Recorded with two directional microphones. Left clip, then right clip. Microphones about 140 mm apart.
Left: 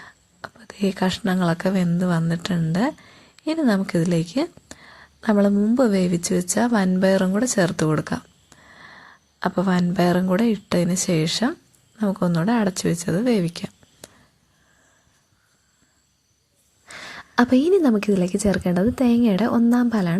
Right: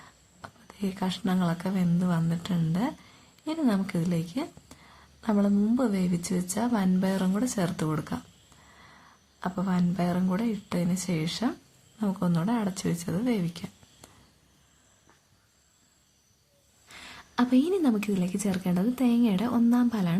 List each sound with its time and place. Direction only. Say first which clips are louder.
0.0 s speech: left 9 dB; 35° left (ahead or behind)
16.8 s a woman's voice: left 9 dB; 45° left (ahead or behind)